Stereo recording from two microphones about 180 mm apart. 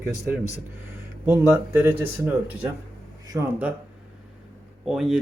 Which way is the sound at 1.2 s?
10° right (ahead or behind).